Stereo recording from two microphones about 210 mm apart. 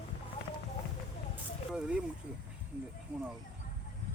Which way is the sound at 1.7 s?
5° right (ahead or behind).